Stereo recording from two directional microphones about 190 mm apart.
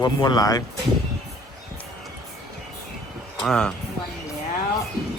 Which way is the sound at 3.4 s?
5° left (ahead or behind).